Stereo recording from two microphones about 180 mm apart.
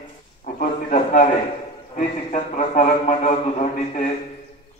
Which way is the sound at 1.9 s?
40° left (ahead or behind).